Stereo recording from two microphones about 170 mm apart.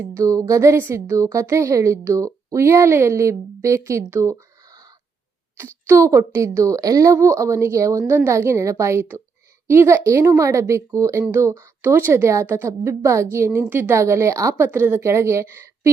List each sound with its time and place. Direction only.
0.0 s a woman's voice: 15° right (ahead or behind)